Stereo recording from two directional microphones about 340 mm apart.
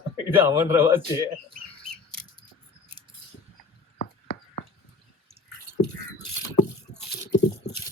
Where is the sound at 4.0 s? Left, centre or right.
Left.